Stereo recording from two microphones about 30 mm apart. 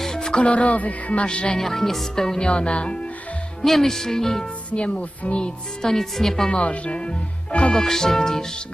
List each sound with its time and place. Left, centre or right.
0.0 s music: left
0.3 s speech: left
1.2 s speech: left
1.6 s speech: centre
2.5 s speech: left
3.7 s speech: centre
4.7 s speech: left
5.8 s speech: centre
6.6 s speech: left
7.7 s music: centre